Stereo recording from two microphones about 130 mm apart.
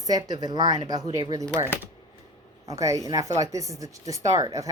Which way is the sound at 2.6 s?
25° right (ahead or behind).